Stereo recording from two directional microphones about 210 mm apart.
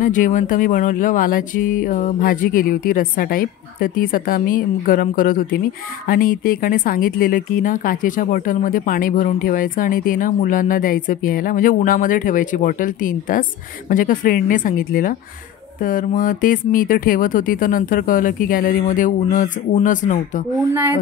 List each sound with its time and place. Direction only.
0.0 s speech: 40° left (ahead or behind)